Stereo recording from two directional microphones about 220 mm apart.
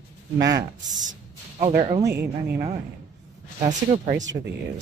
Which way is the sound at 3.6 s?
35° right (ahead or behind).